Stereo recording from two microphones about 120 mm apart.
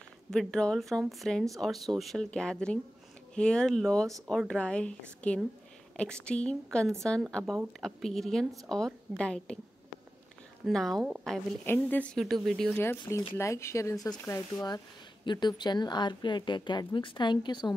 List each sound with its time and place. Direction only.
0.3 s a woman's voice: 5° left (ahead or behind)
10.6 s a woman's voice: 5° left (ahead or behind)
11.6 s a woman's voice: 15° left (ahead or behind)
13.3 s a woman's voice: 25° left (ahead or behind); by 17.7 s 40° left (ahead or behind)